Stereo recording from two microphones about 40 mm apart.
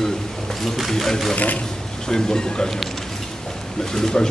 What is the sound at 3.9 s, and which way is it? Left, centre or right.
Speech, centre.